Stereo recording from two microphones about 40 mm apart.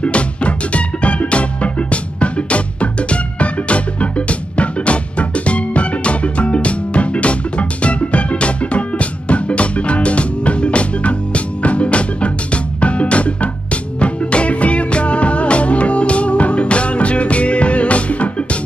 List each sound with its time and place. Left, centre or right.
0.0 s music: left